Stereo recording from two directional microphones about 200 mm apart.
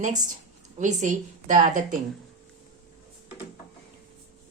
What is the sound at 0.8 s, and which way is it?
A woman's voice, 40° right (ahead or behind).